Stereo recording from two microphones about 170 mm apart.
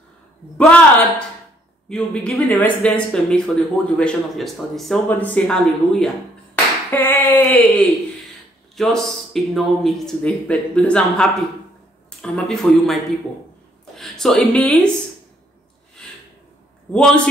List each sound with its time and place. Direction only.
0.6 s speech: 5° left (ahead or behind)
6.5 s a sound: 10° left (ahead or behind)
8.7 s speech: centre (ahead or behind)
13.9 s a woman's voice: centre (ahead or behind)
16.9 s speech: 5° left (ahead or behind)